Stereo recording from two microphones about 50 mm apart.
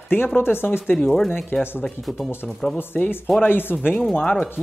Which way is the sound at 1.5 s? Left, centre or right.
Left.